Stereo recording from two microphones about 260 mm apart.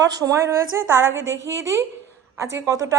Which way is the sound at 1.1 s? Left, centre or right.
Right.